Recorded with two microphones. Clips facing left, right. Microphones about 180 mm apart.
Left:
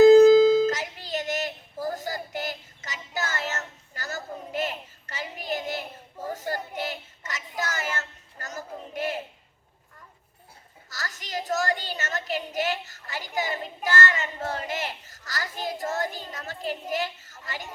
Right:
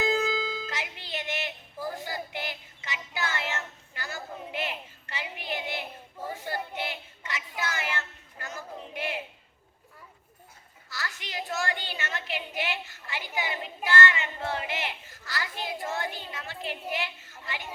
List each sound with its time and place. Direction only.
0.0 s music: 40° left (ahead or behind)
10.8 s child singing: 40° left (ahead or behind)
17.4 s music: 40° left (ahead or behind)